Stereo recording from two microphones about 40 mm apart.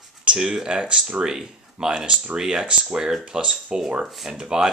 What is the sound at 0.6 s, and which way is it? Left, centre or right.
Speech, right.